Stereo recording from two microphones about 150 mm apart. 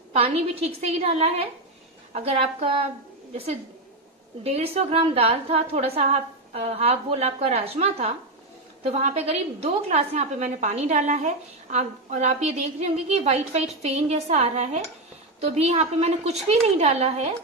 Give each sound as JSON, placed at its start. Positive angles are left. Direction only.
{"t": 0.1, "sound": "a woman's voice", "side_deg": -40}
{"t": 4.4, "sound": "a woman's voice", "side_deg": -45}